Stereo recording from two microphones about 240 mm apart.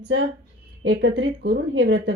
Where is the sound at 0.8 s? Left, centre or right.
Right.